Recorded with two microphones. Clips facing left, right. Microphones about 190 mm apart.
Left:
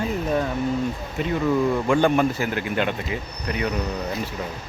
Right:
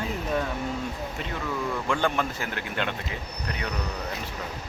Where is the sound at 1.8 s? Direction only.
15° left (ahead or behind).